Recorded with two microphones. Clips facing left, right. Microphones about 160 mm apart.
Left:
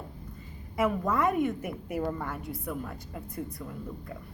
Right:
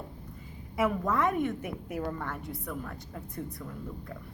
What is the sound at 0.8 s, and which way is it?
A woman's voice, centre (ahead or behind).